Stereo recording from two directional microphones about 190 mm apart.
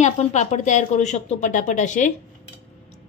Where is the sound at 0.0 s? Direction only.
35° left (ahead or behind).